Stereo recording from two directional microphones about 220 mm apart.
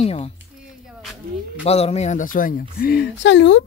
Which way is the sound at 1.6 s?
30° left (ahead or behind).